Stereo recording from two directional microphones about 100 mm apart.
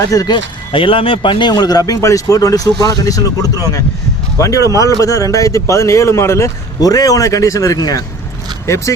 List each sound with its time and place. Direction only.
0.1 s a man's voice: 35° left (ahead or behind)
0.3 s speech: 60° left (ahead or behind); by 1.8 s 45° left (ahead or behind)
1.9 s a man's voice: 35° left (ahead or behind)